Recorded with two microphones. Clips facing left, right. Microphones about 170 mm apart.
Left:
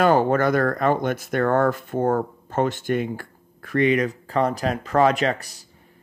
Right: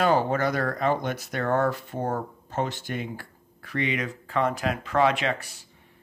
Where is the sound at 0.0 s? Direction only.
50° left (ahead or behind).